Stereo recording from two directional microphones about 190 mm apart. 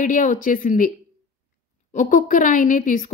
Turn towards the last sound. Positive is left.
turn(degrees=45)  # may be behind; listen again after turning